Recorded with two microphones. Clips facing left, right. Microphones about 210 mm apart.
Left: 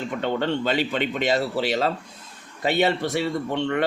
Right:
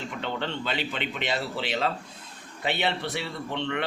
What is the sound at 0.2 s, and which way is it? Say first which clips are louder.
A man's voice: left 8 dB; 45° left (ahead or behind).